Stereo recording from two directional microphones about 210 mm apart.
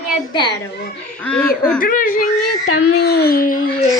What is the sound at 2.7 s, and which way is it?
Speech, 90° left.